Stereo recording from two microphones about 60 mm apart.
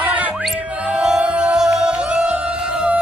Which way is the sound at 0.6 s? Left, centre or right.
Right.